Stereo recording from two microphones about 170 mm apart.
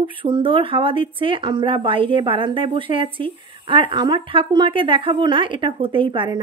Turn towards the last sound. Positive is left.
turn(degrees=-25)  # may be behind; listen again after turning